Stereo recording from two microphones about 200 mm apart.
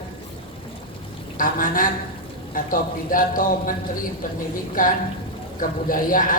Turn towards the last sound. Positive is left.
turn(degrees=45)  # may be behind; listen again after turning